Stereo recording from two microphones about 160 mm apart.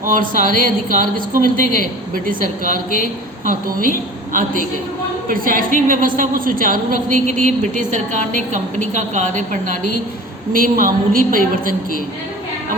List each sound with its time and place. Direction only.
0.0 s a woman's voice: 55° right (ahead or behind)
2.9 s a man's voice: 65° left (ahead or behind)
3.5 s a woman's voice: 60° right (ahead or behind)
10.5 s a woman's voice: 60° right (ahead or behind)